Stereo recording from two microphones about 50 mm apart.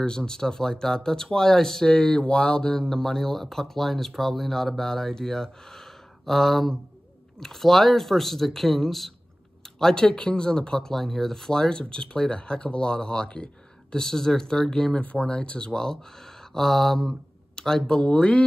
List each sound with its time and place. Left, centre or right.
0.0 s speech: centre
15.0 s speech: left